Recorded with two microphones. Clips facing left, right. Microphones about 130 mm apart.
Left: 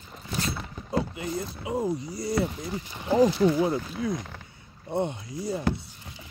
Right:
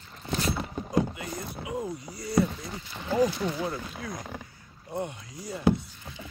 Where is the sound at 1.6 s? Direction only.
30° left (ahead or behind).